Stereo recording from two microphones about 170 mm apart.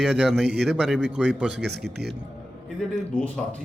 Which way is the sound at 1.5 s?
80° right.